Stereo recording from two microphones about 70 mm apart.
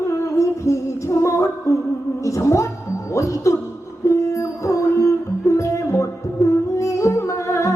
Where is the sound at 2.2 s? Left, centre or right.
Left.